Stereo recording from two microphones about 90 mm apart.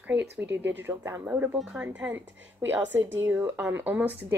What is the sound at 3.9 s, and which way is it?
Speech, 15° right (ahead or behind).